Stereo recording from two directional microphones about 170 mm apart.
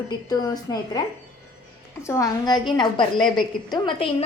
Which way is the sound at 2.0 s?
20° left (ahead or behind).